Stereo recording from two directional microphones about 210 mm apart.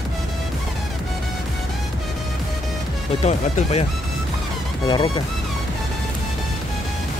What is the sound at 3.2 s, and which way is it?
Speech, 30° left (ahead or behind).